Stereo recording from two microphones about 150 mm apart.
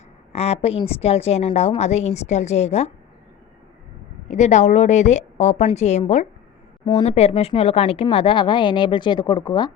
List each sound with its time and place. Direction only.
0.3 s a woman's voice: 45° left (ahead or behind)
4.3 s a woman's voice: 50° left (ahead or behind); by 9.7 s 30° left (ahead or behind)